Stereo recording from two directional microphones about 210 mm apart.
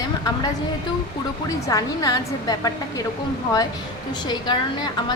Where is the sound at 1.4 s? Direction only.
15° left (ahead or behind).